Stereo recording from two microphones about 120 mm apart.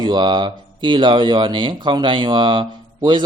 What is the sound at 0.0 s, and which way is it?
Speech, 40° right (ahead or behind).